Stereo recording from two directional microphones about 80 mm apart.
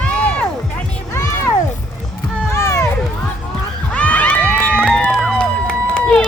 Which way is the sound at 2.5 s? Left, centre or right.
Left.